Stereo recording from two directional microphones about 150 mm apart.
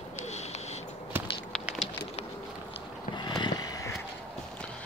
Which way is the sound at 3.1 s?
30° left (ahead or behind).